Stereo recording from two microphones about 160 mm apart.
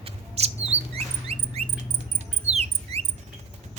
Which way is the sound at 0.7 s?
40° right (ahead or behind).